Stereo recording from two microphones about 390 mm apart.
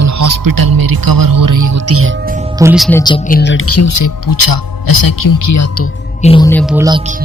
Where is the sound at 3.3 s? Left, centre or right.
Left.